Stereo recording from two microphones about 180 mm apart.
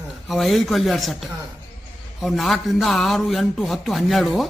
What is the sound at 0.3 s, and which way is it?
Speech, centre (ahead or behind).